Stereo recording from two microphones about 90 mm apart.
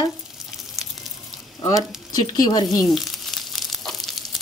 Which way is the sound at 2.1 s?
45° left (ahead or behind).